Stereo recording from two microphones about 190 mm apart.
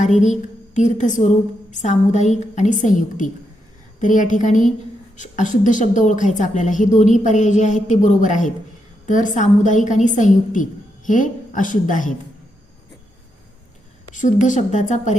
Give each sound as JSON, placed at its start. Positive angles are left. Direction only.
{"t": 0.0, "sound": "a woman's voice", "side_deg": 40}
{"t": 14.1, "sound": "a woman's voice", "side_deg": 40}